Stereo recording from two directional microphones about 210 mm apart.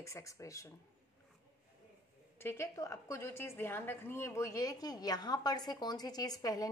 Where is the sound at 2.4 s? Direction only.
10° left (ahead or behind).